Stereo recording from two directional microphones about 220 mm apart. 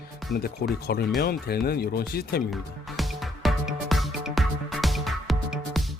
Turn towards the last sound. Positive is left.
turn(degrees=0)  # may be behind; listen again after turning